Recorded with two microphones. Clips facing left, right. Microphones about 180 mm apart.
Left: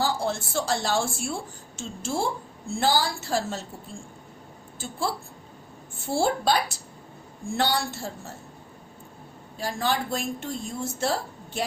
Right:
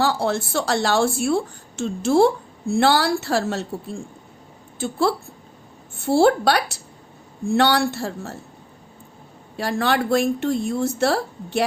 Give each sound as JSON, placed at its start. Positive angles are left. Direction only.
{"t": 0.0, "sound": "a woman's voice", "side_deg": -65}
{"t": 9.6, "sound": "a woman's voice", "side_deg": -70}